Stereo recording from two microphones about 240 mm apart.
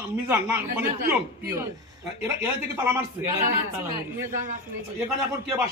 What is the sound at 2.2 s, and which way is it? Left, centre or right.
Speech, centre.